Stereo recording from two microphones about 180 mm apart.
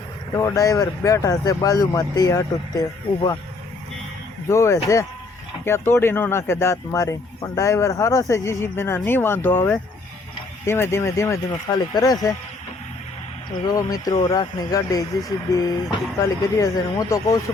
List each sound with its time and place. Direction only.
0.3 s speech: 20° left (ahead or behind)
4.4 s speech: 15° left (ahead or behind)
13.7 s speech: 20° left (ahead or behind)